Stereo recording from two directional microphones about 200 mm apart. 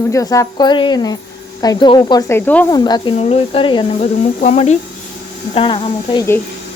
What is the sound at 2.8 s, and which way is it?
Speech, 20° left (ahead or behind).